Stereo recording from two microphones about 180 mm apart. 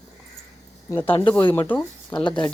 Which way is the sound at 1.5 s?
10° left (ahead or behind).